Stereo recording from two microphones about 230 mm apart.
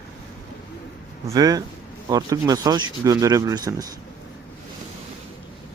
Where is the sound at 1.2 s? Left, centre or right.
Centre.